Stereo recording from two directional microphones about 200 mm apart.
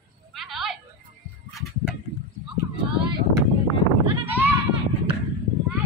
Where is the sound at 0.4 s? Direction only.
Centre (ahead or behind).